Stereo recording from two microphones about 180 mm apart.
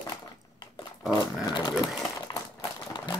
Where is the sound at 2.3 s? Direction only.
25° left (ahead or behind).